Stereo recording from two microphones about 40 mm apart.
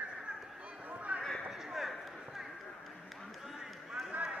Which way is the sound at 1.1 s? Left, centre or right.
Right.